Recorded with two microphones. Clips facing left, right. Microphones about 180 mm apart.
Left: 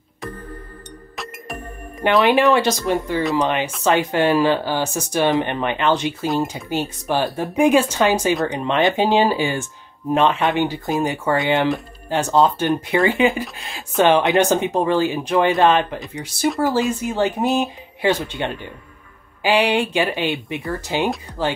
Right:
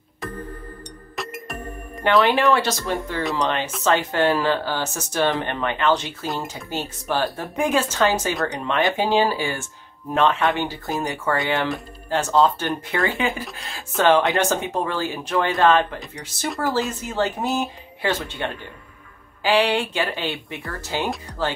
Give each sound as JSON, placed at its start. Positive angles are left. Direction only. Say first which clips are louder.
{"t": 1.1, "sound": "music", "louder": "right 1 dB", "side_deg": 0}
{"t": 2.0, "sound": "speech", "louder": "left 2 dB", "side_deg": 20}